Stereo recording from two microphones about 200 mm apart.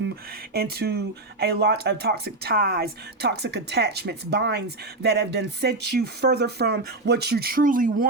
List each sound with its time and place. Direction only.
0.5 s speech: 50° right (ahead or behind)